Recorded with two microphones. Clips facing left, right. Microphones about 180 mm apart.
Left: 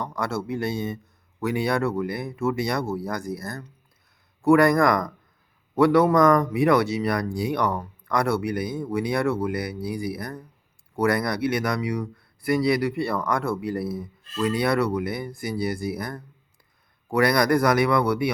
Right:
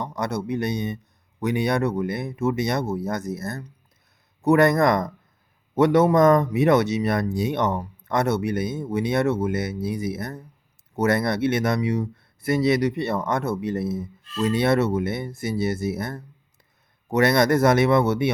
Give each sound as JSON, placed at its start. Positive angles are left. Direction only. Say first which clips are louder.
{"t": 0.0, "sound": "speech", "louder": "right 1 dB", "side_deg": -20}